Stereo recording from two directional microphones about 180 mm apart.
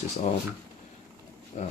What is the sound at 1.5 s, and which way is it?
Speech, 40° left (ahead or behind).